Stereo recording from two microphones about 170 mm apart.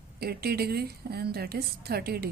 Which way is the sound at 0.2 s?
65° right (ahead or behind).